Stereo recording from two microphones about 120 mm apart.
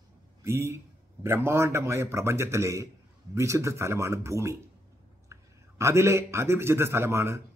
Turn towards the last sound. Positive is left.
turn(degrees=-20)  # may be behind; listen again after turning